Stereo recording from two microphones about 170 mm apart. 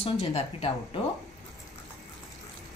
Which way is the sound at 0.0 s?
35° left (ahead or behind).